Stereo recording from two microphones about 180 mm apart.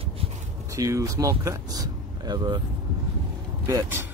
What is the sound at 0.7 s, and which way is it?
Speech, 15° right (ahead or behind).